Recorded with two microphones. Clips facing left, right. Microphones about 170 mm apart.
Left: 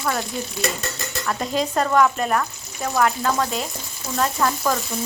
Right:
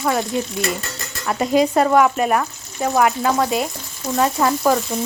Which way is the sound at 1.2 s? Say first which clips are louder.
Right 7 dB; 10° right (ahead or behind).